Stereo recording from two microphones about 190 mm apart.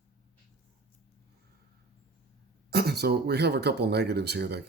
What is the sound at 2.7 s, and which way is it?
Speech, 55° right (ahead or behind).